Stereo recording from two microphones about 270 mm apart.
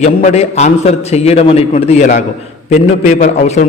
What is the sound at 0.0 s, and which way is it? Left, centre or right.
A man's voice, left.